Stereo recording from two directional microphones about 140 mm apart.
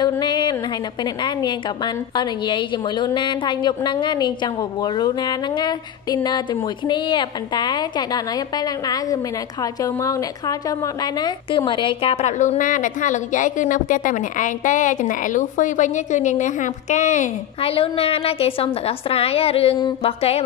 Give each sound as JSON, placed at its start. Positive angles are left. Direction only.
{"t": 0.0, "sound": "music", "side_deg": 30}
{"t": 2.1, "sound": "a woman's voice", "side_deg": 35}
{"t": 11.1, "sound": "a woman's voice", "side_deg": 35}
{"t": 17.6, "sound": "a woman's voice", "side_deg": 45}